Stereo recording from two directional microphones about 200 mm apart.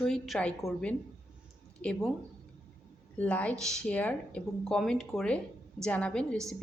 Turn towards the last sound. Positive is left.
turn(degrees=5)  # may be behind; listen again after turning